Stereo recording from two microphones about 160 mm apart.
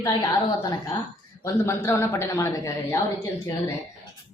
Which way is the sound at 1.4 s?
15° left (ahead or behind).